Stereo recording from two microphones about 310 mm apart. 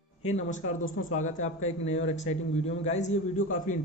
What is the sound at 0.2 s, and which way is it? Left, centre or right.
A man's voice, left.